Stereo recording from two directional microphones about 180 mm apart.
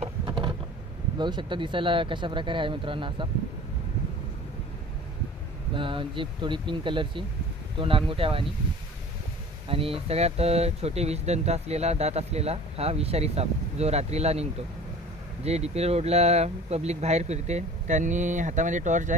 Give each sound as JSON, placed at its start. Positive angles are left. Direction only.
{"t": 0.2, "sound": "vehicle", "side_deg": -25}
{"t": 1.1, "sound": "speech", "side_deg": -25}
{"t": 5.8, "sound": "speech", "side_deg": -30}
{"t": 9.7, "sound": "speech", "side_deg": -30}